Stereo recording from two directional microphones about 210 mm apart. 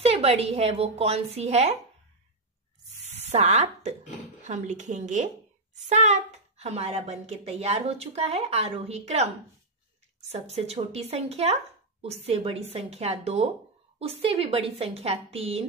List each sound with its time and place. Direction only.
0.0 s a woman's voice: 30° right (ahead or behind)
3.0 s spray: 30° right (ahead or behind)
4.4 s a woman's voice: 35° right (ahead or behind)
10.3 s a woman's voice: 30° right (ahead or behind)